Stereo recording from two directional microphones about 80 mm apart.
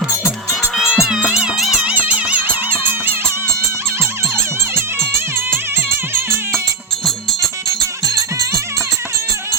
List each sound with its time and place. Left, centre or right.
0.8 s music: centre
1.8 s music: centre
4.7 s music: right
8.0 s music: right